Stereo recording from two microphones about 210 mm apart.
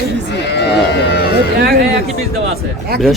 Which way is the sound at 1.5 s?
50° right (ahead or behind).